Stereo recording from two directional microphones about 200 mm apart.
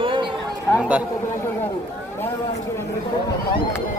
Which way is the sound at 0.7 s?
5° right (ahead or behind).